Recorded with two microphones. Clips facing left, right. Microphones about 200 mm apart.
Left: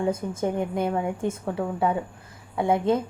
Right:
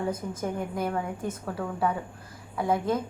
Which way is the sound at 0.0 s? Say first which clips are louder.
Left 5 dB; 25° left (ahead or behind).